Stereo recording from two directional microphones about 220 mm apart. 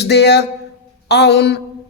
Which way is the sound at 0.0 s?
50° left (ahead or behind).